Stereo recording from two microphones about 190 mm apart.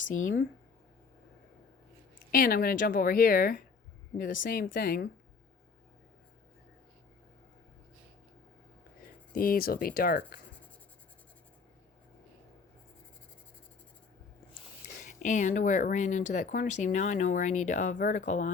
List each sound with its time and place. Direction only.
0.1 s speech: 45° left (ahead or behind)
2.3 s speech: 50° left (ahead or behind)
9.3 s speech: 50° left (ahead or behind)
14.9 s speech: 40° left (ahead or behind)